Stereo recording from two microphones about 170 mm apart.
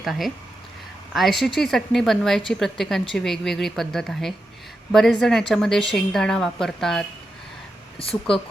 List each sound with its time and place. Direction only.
0.0 s a woman's voice: centre (ahead or behind)
7.9 s speech: 35° left (ahead or behind)